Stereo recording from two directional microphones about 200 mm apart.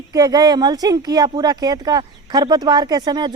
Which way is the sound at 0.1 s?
20° right (ahead or behind).